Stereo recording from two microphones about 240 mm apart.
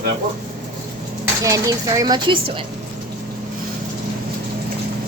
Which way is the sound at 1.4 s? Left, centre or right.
Centre.